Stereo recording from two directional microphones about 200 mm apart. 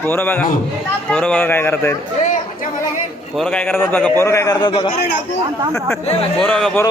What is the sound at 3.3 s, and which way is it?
A man's voice, 5° left (ahead or behind).